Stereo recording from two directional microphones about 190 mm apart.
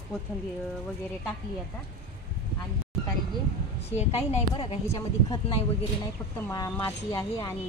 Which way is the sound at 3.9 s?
35° left (ahead or behind).